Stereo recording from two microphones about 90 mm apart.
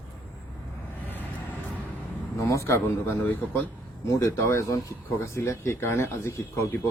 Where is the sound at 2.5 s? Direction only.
30° left (ahead or behind).